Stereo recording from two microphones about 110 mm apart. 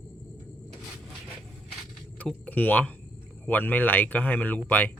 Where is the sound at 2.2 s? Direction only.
15° left (ahead or behind).